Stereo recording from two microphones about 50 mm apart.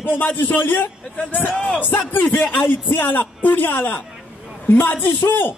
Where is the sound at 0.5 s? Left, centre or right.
Left.